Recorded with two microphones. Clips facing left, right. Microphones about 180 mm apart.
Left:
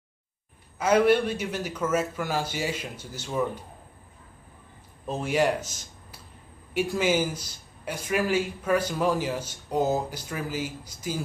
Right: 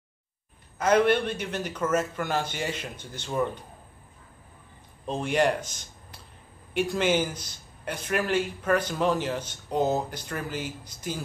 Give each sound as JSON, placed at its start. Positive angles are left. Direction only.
{"t": 0.7, "sound": "a man's voice", "side_deg": 10}
{"t": 5.0, "sound": "a man's voice", "side_deg": 5}